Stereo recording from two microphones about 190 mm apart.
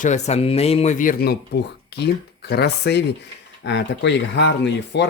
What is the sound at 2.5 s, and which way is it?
Speech, 60° left (ahead or behind).